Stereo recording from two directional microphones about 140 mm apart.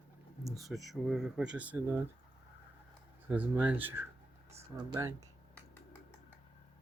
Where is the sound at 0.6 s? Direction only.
Centre (ahead or behind).